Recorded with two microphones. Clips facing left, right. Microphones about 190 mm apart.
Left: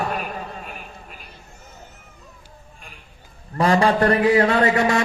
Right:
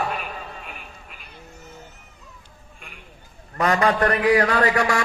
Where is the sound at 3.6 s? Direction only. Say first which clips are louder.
Left 3 dB; 30° left (ahead or behind).